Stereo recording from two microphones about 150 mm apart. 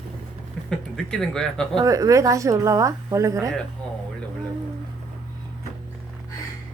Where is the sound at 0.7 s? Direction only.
5° left (ahead or behind).